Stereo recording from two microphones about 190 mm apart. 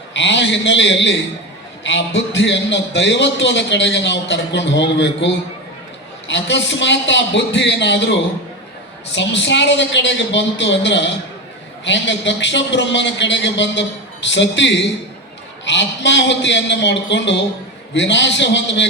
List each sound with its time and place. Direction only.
0.1 s a man's voice: 70° left (ahead or behind)
9.1 s a man's voice: 70° left (ahead or behind)